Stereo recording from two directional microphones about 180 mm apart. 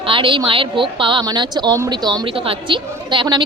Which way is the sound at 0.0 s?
30° right (ahead or behind).